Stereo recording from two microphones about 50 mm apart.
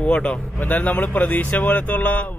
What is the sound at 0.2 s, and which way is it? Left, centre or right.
A man's voice, left.